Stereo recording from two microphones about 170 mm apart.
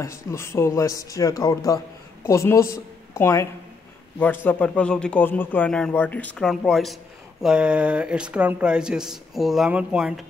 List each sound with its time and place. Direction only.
0.0 s a woman's voice: 15° left (ahead or behind)
4.5 s speech: 10° left (ahead or behind)